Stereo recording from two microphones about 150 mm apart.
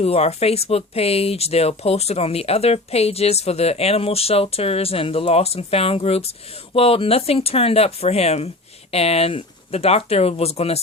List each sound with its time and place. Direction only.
0.0 s speech: 45° left (ahead or behind)